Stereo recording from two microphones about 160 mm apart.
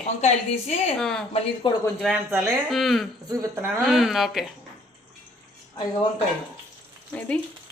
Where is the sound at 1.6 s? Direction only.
30° left (ahead or behind).